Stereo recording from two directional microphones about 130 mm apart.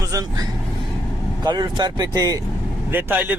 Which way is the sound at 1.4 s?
35° right (ahead or behind).